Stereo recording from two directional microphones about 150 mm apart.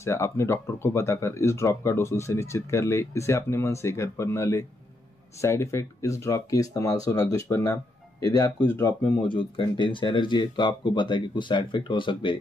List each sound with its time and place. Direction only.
0.0 s speech: 20° left (ahead or behind)